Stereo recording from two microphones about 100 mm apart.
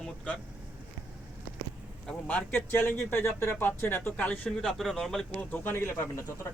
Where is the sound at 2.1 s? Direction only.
15° left (ahead or behind).